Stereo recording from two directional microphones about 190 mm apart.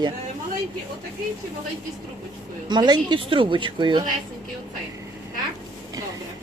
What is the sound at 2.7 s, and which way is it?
Speech, 25° right (ahead or behind).